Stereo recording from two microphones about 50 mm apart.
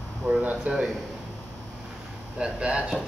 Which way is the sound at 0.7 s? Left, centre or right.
Right.